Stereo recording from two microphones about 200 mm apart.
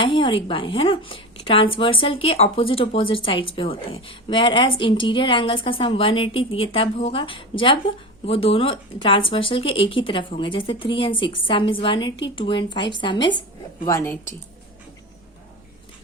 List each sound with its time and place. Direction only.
0.0 s a woman's voice: 25° left (ahead or behind)